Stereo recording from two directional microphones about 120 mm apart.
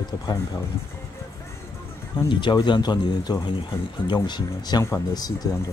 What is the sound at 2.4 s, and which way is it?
Speech, 40° left (ahead or behind).